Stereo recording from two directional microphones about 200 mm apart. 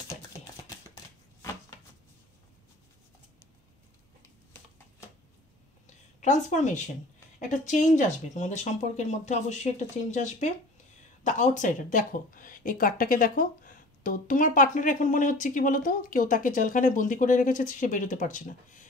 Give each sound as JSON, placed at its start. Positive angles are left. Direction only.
{"t": 6.2, "sound": "speech", "side_deg": 35}